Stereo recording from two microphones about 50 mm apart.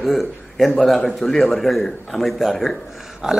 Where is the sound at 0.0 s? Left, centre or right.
Centre.